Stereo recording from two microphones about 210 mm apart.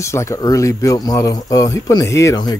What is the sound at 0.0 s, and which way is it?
Speech, 15° left (ahead or behind).